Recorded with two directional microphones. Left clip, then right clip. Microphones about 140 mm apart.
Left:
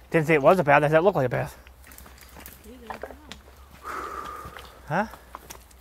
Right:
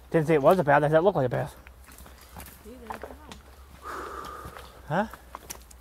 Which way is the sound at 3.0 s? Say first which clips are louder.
Left 3 dB; 90° left.